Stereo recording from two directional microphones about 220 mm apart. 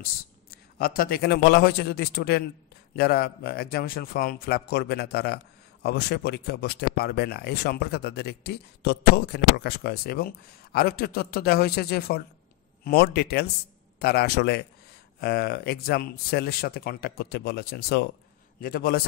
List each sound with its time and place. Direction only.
0.0 s a man's voice: 45° left (ahead or behind)